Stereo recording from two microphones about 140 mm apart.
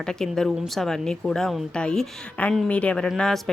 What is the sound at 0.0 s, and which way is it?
Speech, 5° left (ahead or behind).